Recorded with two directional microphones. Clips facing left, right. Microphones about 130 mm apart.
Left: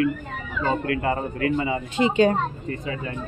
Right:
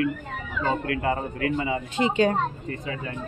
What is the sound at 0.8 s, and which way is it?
Speech, 45° left (ahead or behind).